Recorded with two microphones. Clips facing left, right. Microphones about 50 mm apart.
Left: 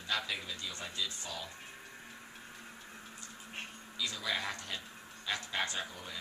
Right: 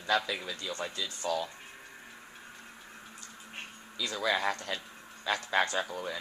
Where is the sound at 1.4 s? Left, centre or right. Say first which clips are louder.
Right 6 dB; centre.